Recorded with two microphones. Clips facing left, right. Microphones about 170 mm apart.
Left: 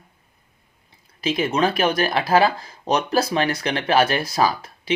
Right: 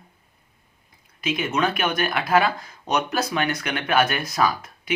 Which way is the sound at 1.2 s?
30° left (ahead or behind).